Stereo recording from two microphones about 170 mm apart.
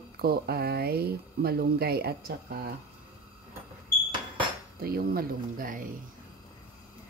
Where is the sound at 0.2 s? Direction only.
65° right (ahead or behind).